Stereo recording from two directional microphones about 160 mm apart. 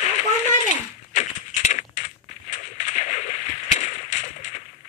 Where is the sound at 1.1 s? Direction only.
45° left (ahead or behind).